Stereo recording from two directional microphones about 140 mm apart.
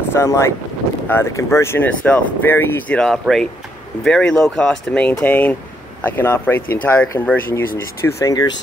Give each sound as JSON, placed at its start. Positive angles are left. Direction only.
{"t": 0.1, "sound": "speech", "side_deg": 20}
{"t": 3.0, "sound": "speech", "side_deg": 5}